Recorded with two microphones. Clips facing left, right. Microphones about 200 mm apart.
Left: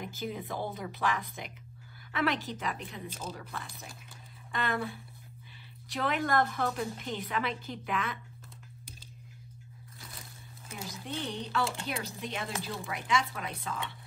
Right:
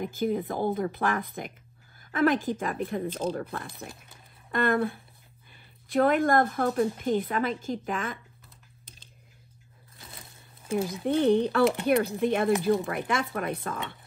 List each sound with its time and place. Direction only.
0.0 s a woman's voice: 50° right (ahead or behind)
10.8 s speech: 55° right (ahead or behind)